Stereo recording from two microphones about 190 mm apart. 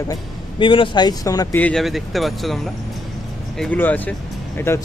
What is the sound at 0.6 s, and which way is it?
Speech, 25° left (ahead or behind).